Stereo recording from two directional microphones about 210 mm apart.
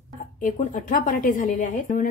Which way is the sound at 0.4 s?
40° left (ahead or behind).